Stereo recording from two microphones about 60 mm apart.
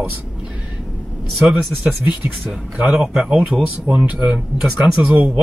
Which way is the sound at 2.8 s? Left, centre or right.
Centre.